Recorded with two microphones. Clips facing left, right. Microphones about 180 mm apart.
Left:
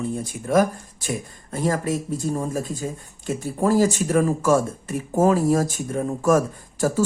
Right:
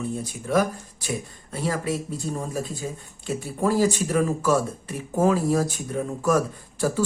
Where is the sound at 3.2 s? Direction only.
45° left (ahead or behind).